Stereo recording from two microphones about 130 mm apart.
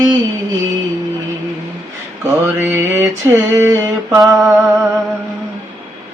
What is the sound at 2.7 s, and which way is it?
Mantra, 20° right (ahead or behind).